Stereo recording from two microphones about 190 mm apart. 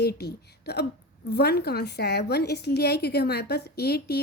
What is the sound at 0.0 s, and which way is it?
Speech, 60° left (ahead or behind).